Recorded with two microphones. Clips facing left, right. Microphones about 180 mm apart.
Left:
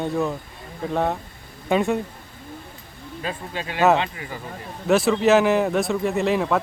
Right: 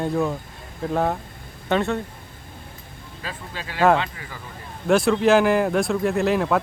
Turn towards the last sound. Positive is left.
turn(degrees=0)  # may be behind; listen again after turning